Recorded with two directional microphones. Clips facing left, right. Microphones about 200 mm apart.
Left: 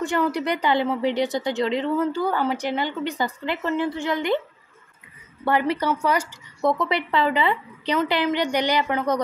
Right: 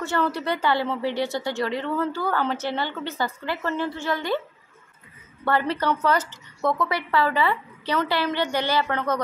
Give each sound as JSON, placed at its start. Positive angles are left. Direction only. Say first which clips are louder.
{"t": 0.0, "sound": "a woman's voice", "louder": "left 2 dB", "side_deg": 15}
{"t": 5.4, "sound": "a woman's voice", "louder": "left 2 dB", "side_deg": 15}